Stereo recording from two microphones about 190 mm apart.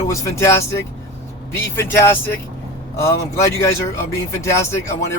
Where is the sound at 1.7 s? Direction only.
10° left (ahead or behind).